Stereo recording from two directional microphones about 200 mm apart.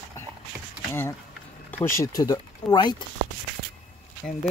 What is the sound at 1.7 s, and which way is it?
Speech, 10° left (ahead or behind).